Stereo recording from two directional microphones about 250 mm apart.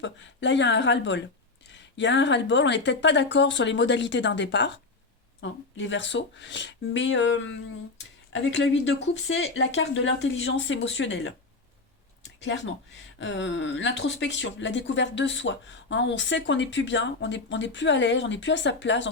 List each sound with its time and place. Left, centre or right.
0.0 s speech: left
12.4 s speech: left